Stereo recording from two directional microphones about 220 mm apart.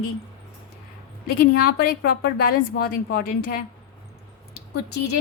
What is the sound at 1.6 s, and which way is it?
A woman's voice, 45° left (ahead or behind).